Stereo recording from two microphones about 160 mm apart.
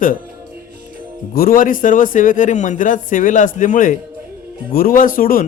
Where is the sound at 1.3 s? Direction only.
70° left (ahead or behind).